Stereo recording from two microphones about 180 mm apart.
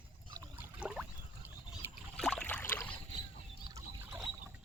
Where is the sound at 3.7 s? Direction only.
10° right (ahead or behind).